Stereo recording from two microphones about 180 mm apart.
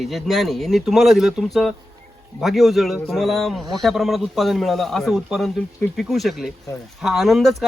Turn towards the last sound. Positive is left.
turn(degrees=0)  # may be behind; listen again after turning